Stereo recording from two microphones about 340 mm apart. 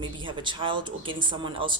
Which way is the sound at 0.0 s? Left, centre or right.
Centre.